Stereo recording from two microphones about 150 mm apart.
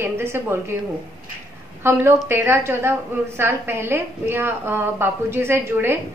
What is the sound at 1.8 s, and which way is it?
A woman's voice, 15° right (ahead or behind).